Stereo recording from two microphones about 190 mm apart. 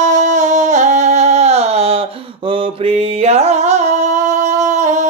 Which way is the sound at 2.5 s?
30° right (ahead or behind).